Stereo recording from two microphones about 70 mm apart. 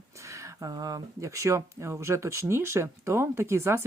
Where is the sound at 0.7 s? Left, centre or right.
Right.